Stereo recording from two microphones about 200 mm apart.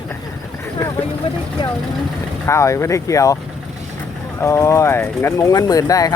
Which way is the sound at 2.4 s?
15° left (ahead or behind).